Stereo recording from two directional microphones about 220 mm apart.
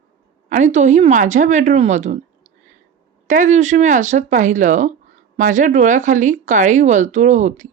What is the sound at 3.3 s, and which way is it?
Speech, 35° right (ahead or behind).